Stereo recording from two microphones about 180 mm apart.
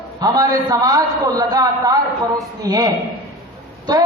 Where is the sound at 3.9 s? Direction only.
20° right (ahead or behind).